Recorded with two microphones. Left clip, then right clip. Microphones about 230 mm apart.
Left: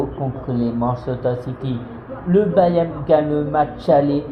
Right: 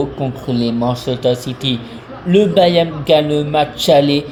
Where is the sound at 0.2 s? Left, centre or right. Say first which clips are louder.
Right 4 dB; right.